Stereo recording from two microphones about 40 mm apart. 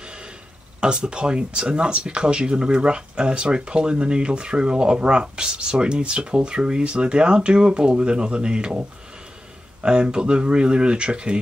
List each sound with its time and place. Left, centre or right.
0.7 s speech: right
9.8 s speech: right